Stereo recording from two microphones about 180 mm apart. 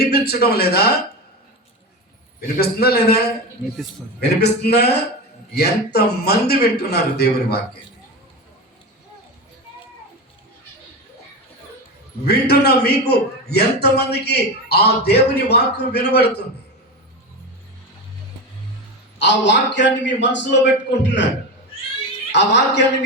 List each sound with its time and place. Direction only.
0.0 s a man's voice: 60° left (ahead or behind)
2.6 s a man's voice: 60° left (ahead or behind)
12.2 s a man's voice: 65° left (ahead or behind)
19.2 s a man's voice: 75° left (ahead or behind)
22.3 s a man's voice: 75° left (ahead or behind)